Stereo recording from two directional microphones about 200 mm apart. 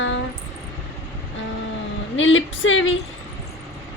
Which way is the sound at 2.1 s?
70° left (ahead or behind).